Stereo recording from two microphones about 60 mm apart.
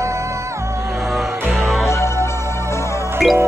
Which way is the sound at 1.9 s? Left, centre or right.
Left.